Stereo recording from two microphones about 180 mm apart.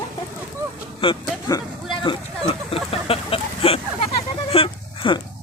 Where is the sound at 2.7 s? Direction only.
30° left (ahead or behind).